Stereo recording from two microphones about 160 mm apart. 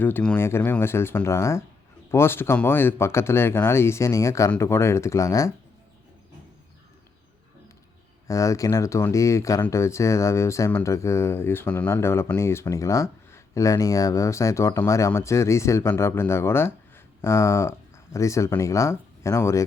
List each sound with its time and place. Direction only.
0.0 s speech: 10° left (ahead or behind)
8.3 s speech: 20° left (ahead or behind)